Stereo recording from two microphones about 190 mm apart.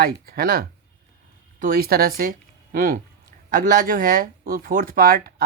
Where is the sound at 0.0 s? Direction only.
55° right (ahead or behind).